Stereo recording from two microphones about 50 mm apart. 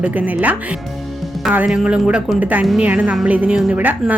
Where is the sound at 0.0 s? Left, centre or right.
Right.